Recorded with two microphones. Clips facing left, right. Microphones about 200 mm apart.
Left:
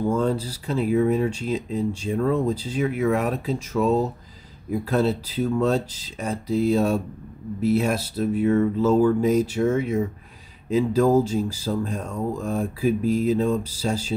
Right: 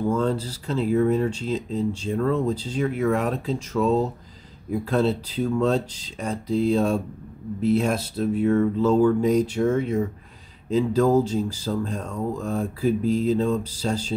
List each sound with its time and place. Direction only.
0.0 s speech: 10° left (ahead or behind)